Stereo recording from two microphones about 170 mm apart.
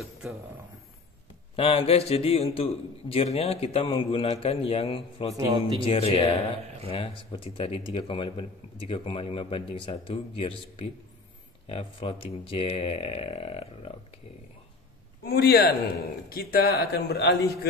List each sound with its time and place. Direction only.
1.6 s a man's voice: 35° left (ahead or behind)
5.3 s speech: 20° right (ahead or behind)
5.8 s a man's voice: 30° left (ahead or behind)
15.2 s a man's voice: 70° left (ahead or behind)